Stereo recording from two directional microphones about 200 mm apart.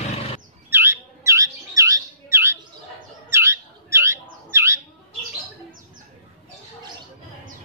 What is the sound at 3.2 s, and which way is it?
Bird, 15° right (ahead or behind).